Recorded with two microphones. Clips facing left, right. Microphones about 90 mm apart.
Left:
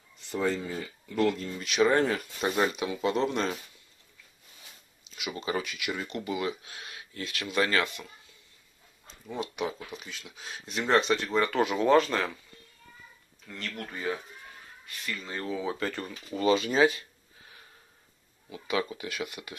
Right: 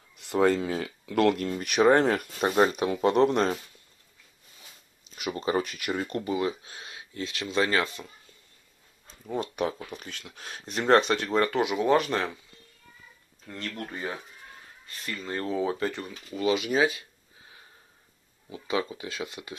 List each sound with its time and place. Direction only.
0.2 s speech: 80° right; by 2.0 s 55° right (ahead or behind)
2.4 s speech: 35° right (ahead or behind)
5.1 s speech: 40° right (ahead or behind)
9.0 s a sound: 40° right (ahead or behind)
9.9 s speech: 55° right (ahead or behind)
11.5 s speech: 15° right (ahead or behind)
13.6 s speech: 30° right (ahead or behind)
15.2 s speech: 40° right (ahead or behind)
16.3 s speech: 10° right (ahead or behind)
18.5 s speech: 25° right (ahead or behind)